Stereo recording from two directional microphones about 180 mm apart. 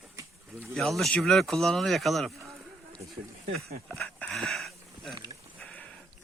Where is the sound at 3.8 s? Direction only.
5° left (ahead or behind).